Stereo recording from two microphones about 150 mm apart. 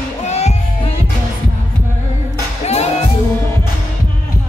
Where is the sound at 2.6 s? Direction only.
45° left (ahead or behind).